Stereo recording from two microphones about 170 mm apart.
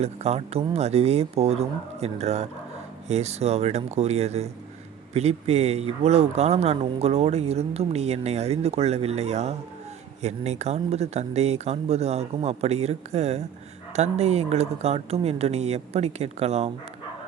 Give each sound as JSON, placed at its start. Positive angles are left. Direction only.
{"t": 0.0, "sound": "speech", "side_deg": -40}